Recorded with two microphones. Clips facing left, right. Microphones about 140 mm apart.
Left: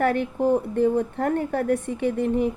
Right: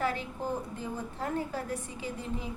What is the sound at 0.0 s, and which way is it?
A woman's voice, 60° left (ahead or behind).